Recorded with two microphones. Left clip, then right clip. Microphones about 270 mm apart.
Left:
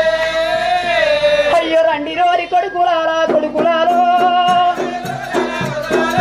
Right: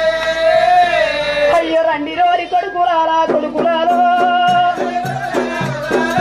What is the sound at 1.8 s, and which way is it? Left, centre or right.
Music, left.